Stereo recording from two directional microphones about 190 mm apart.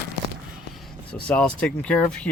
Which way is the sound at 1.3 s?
5° left (ahead or behind).